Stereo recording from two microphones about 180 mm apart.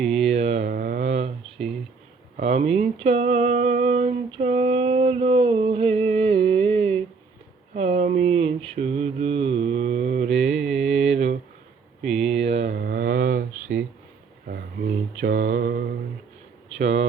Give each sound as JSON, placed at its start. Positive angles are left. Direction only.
{"t": 0.0, "sound": "mantra", "side_deg": 0}
{"t": 0.3, "sound": "mantra", "side_deg": -35}
{"t": 0.7, "sound": "mantra", "side_deg": -55}
{"t": 2.4, "sound": "speech", "side_deg": -35}
{"t": 2.8, "sound": "female singing", "side_deg": -35}
{"t": 7.8, "sound": "a sound", "side_deg": -40}
{"t": 8.7, "sound": "mantra", "side_deg": -35}
{"t": 10.4, "sound": "music", "side_deg": 0}
{"t": 12.0, "sound": "a sound", "side_deg": 0}
{"t": 12.5, "sound": "a sound", "side_deg": -35}
{"t": 12.7, "sound": "mantra", "side_deg": -60}
{"t": 14.4, "sound": "a sound", "side_deg": -55}
{"t": 15.2, "sound": "mantra", "side_deg": -80}